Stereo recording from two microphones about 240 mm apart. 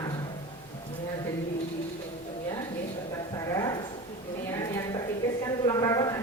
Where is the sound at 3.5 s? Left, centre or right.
Centre.